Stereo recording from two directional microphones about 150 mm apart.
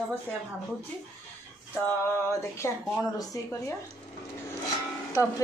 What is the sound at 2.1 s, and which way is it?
Speech, 15° left (ahead or behind).